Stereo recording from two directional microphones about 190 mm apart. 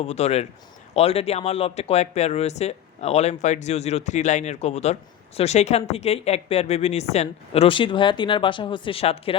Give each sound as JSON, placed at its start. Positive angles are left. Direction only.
{"t": 0.0, "sound": "speech", "side_deg": 35}